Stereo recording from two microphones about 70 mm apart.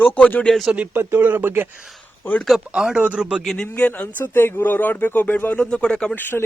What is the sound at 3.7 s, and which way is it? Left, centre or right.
Speech, left.